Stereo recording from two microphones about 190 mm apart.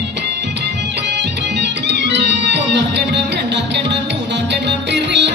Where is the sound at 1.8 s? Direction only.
65° right (ahead or behind).